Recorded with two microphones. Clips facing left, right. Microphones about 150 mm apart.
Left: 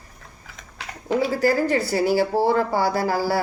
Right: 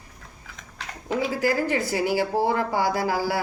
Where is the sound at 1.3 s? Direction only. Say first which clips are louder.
Left 3 dB; 40° left (ahead or behind).